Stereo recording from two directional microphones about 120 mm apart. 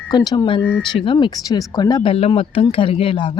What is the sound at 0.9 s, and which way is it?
Speech, 40° left (ahead or behind).